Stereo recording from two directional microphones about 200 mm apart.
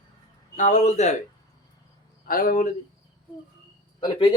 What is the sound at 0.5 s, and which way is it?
Speech, 40° left (ahead or behind).